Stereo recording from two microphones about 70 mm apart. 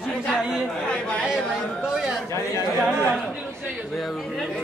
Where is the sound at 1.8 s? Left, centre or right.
Centre.